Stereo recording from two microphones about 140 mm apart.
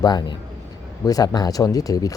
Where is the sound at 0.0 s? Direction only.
30° left (ahead or behind).